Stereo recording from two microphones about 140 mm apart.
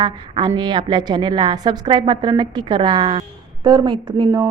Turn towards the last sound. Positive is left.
turn(degrees=-30)  # may be behind; listen again after turning